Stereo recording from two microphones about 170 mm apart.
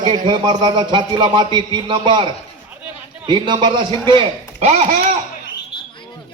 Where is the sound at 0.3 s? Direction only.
25° right (ahead or behind).